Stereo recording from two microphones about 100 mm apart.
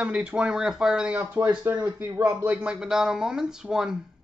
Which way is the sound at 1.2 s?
20° right (ahead or behind).